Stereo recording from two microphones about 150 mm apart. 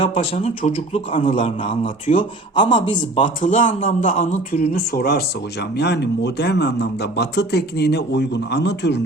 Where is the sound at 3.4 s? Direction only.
60° left (ahead or behind); by 8.8 s 90° left.